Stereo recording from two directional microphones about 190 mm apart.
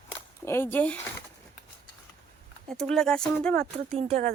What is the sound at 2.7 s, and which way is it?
Speech, centre (ahead or behind).